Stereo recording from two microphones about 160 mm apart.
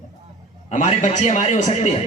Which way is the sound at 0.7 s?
45° left (ahead or behind).